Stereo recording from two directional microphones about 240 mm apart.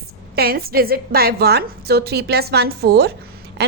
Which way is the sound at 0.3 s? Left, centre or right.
Right.